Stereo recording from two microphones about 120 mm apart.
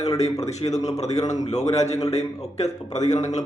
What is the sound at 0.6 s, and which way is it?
A man's voice, 65° left (ahead or behind).